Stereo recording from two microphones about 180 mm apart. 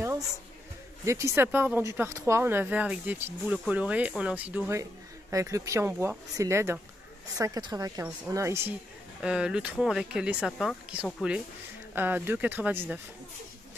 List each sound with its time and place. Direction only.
1.0 s speech: 15° right (ahead or behind)